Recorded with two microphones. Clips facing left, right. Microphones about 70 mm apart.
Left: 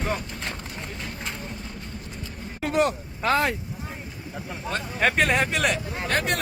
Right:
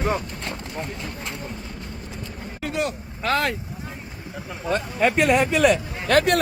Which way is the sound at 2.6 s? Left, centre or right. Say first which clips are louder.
Left 4 dB; left.